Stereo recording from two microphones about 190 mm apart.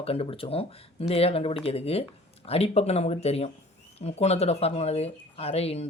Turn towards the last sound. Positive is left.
turn(degrees=30)  # may be behind; listen again after turning